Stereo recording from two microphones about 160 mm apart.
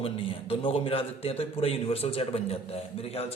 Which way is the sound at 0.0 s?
35° left (ahead or behind).